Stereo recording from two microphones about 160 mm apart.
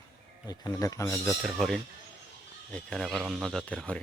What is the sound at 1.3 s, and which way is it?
A man's voice, 5° right (ahead or behind).